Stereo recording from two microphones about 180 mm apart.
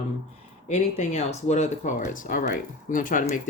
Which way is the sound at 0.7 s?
40° left (ahead or behind).